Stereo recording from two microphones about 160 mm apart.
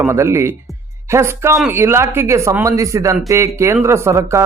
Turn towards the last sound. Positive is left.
turn(degrees=-20)  # may be behind; listen again after turning